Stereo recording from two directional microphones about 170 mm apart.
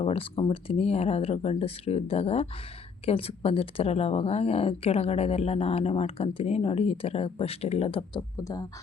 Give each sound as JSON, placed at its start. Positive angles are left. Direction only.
{"t": 0.0, "sound": "speech", "side_deg": 35}
{"t": 8.4, "sound": "speech", "side_deg": 20}